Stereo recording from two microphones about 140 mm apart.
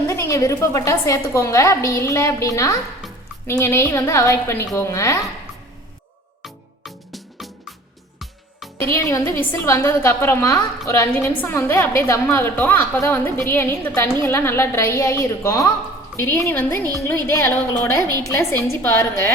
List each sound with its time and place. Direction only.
0.1 s a woman's voice: 20° left (ahead or behind)
6.4 s music: centre (ahead or behind)
8.9 s a woman's voice: 20° left (ahead or behind)